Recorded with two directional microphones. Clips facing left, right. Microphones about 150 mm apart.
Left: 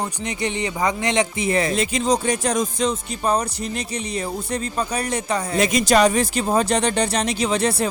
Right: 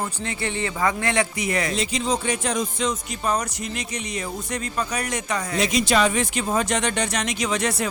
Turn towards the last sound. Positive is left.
turn(degrees=30)  # may be behind; listen again after turning